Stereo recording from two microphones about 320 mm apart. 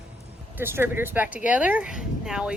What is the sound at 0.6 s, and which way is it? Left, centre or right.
Speech, centre.